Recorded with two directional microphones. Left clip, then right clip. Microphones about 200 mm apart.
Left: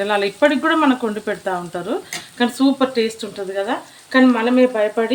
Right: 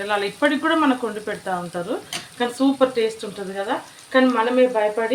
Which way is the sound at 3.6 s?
40° left (ahead or behind).